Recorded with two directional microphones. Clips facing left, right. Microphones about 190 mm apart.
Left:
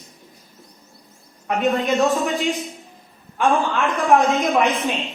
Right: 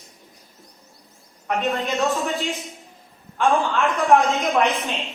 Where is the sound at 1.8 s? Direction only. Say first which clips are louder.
Left 4 dB; 15° left (ahead or behind).